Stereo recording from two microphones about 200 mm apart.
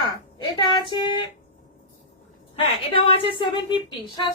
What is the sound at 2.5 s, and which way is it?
Speech, 25° left (ahead or behind).